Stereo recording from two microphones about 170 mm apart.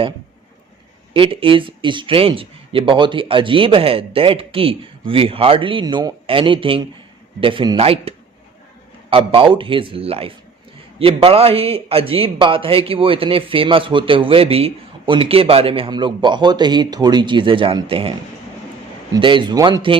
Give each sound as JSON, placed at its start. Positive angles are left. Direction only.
{"t": 1.1, "sound": "a man's voice", "side_deg": -30}
{"t": 19.1, "sound": "speech", "side_deg": -30}